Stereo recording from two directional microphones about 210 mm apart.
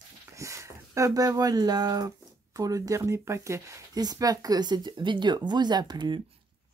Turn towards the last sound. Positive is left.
turn(degrees=-20)  # may be behind; listen again after turning